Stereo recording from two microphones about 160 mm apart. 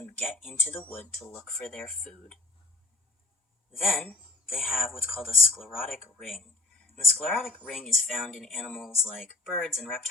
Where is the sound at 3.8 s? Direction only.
Centre (ahead or behind).